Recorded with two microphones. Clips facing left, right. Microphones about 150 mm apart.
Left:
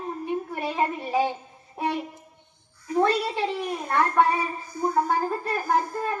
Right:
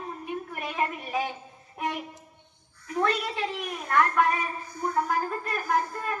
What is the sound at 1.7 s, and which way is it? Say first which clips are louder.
Music: left 4 dB; 30° left (ahead or behind).